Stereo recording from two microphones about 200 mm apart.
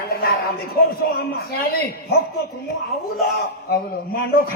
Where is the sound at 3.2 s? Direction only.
50° left (ahead or behind).